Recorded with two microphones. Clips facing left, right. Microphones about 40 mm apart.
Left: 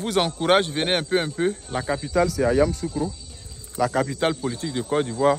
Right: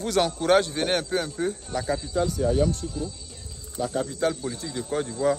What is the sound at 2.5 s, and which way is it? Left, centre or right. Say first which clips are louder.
Speech: left 2 dB; left.